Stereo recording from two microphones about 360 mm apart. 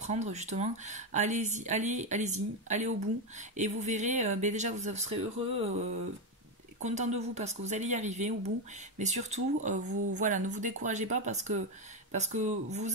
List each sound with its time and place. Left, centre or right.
0.0 s speech: centre
6.8 s speech: centre